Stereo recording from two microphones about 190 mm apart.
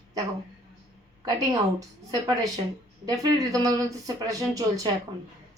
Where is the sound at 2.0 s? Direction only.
20° right (ahead or behind).